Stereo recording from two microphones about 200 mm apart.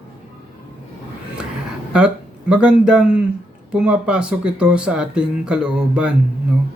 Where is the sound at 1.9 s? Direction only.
5° right (ahead or behind).